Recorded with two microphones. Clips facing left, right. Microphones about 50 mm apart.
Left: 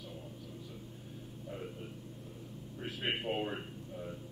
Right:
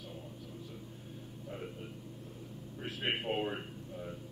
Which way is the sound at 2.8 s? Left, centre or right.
Centre.